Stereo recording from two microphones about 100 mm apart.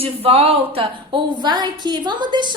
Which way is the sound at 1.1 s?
50° right (ahead or behind).